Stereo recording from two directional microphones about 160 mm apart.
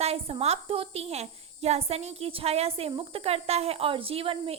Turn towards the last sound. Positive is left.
turn(degrees=-35)  # may be behind; listen again after turning